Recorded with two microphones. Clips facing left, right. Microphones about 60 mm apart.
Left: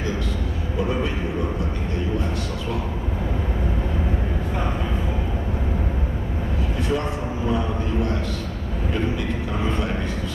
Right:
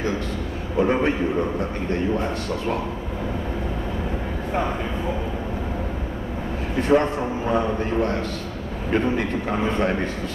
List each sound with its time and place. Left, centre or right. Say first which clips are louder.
0.7 s a man's voice: right 5 dB; right
6.8 s a man's voice: right 8 dB; right